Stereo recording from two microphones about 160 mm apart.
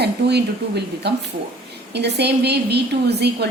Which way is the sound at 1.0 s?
90° right.